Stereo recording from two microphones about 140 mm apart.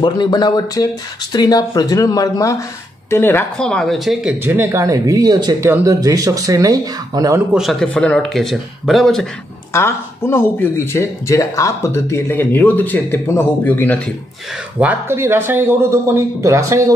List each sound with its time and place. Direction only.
0.0 s speech: 30° left (ahead or behind)
3.1 s speech: 15° left (ahead or behind)
3.5 s speech: 5° left (ahead or behind)
4.6 s speech: 20° right (ahead or behind)
7.5 s speech: centre (ahead or behind)
9.7 s speech: 20° left (ahead or behind)
14.8 s speech: 15° right (ahead or behind)